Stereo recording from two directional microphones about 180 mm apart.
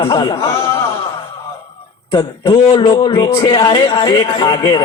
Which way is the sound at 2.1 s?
25° left (ahead or behind).